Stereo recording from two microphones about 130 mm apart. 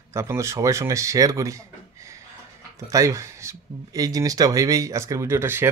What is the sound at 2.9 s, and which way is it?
Speech, 25° right (ahead or behind).